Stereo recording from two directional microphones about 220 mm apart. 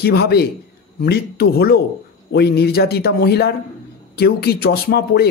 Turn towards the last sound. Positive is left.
turn(degrees=45)  # may be behind; listen again after turning